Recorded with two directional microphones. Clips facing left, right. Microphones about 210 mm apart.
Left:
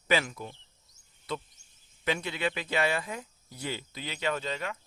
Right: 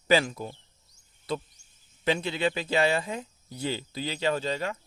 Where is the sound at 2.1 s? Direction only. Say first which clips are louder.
Right 4 dB; 30° right (ahead or behind).